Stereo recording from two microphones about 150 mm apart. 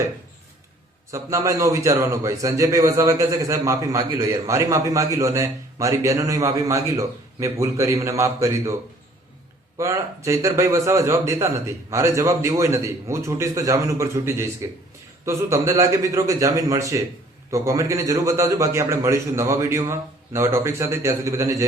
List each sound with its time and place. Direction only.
1.1 s a man's voice: 20° right (ahead or behind)
9.7 s a man's voice: 20° right (ahead or behind)